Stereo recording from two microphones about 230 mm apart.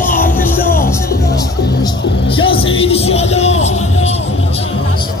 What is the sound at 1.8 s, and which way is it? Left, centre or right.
Music, left.